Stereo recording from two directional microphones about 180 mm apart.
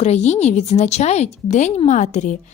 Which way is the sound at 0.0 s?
40° left (ahead or behind).